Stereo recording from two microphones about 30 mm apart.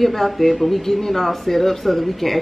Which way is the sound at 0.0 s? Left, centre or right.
Centre.